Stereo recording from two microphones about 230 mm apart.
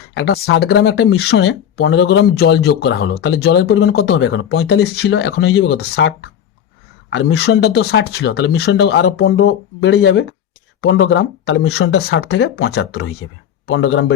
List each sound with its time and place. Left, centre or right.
0.1 s speech: left